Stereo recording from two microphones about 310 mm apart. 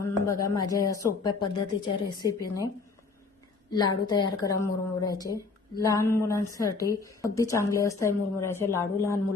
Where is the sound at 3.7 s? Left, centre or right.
Centre.